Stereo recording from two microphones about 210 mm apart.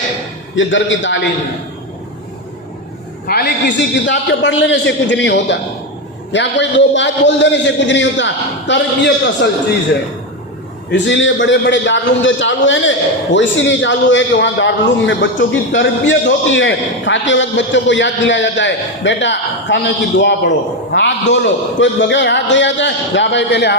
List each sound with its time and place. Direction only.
0.5 s a man's voice: 65° left (ahead or behind)
3.2 s a man's voice: 45° left (ahead or behind)
10.9 s a man's voice: 60° left (ahead or behind)